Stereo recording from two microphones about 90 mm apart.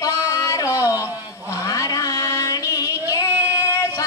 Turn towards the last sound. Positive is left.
turn(degrees=40)  # may be behind; listen again after turning